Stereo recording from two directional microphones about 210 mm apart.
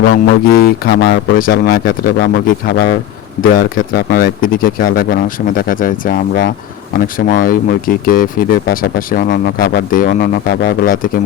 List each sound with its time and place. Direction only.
0.1 s speech: 45° left (ahead or behind)
0.9 s speech: 60° left (ahead or behind)
1.4 s speech: 45° left (ahead or behind)